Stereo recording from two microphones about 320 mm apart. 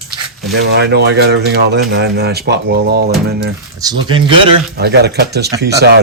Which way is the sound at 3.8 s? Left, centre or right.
Centre.